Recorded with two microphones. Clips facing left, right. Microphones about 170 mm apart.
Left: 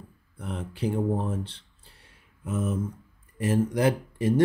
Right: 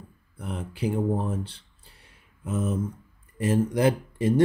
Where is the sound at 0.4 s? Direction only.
10° right (ahead or behind).